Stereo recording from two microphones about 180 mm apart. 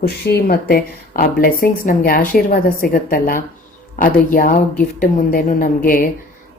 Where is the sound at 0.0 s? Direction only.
60° left (ahead or behind).